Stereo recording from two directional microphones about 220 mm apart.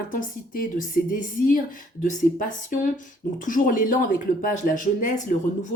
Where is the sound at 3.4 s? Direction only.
35° left (ahead or behind).